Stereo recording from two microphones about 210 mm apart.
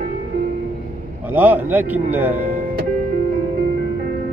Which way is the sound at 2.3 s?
35° right (ahead or behind).